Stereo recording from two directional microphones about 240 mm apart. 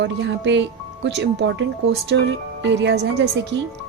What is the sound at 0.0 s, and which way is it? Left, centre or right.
A woman's voice, right.